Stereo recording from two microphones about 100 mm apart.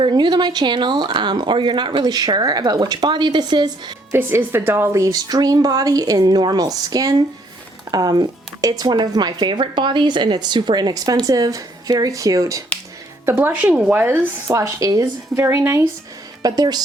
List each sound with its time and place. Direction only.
0.0 s speech: 50° right (ahead or behind)
4.1 s a woman's voice: 20° right (ahead or behind)
13.2 s a woman's voice: 20° right (ahead or behind)
16.4 s a woman's voice: 40° right (ahead or behind)